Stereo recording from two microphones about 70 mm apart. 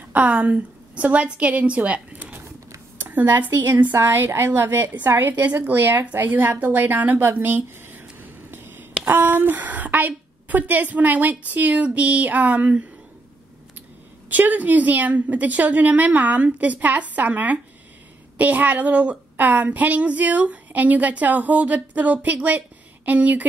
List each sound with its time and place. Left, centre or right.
0.1 s a woman's voice: centre
7.3 s a sound: right
9.0 s a woman's voice: right
14.3 s a woman's voice: right